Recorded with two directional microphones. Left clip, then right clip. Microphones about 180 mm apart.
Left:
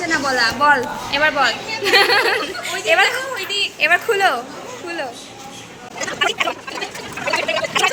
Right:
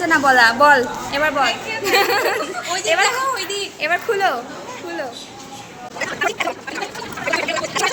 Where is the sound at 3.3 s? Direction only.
70° right (ahead or behind).